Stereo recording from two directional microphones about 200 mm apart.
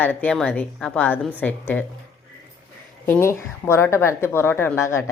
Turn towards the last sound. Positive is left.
turn(degrees=15)  # may be behind; listen again after turning